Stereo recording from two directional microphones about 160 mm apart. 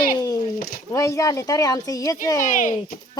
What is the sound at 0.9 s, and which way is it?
Speech, 20° left (ahead or behind).